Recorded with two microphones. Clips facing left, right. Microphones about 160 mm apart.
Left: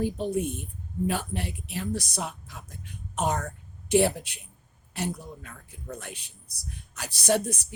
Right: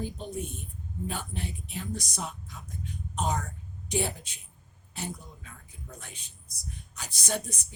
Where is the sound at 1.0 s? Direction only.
75° left (ahead or behind).